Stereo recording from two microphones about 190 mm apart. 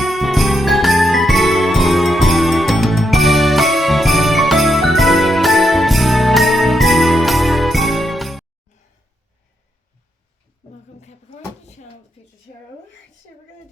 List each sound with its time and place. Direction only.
0.0 s jingle bell: centre (ahead or behind)
11.0 s cupboard open or close: 35° left (ahead or behind)